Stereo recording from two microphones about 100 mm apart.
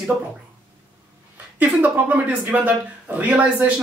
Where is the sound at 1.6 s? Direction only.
15° right (ahead or behind).